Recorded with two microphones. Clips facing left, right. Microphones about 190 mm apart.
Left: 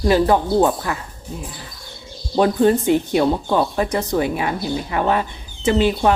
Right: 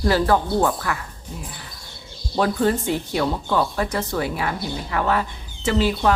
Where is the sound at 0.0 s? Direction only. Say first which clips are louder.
Left 3 dB; 20° left (ahead or behind).